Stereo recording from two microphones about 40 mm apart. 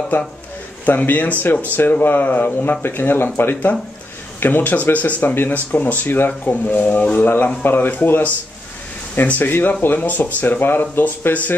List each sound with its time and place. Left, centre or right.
0.1 s speech: left
2.8 s speech: left
5.5 s speech: left
7.6 s speech: left
7.9 s speech: left
10.6 s speech: left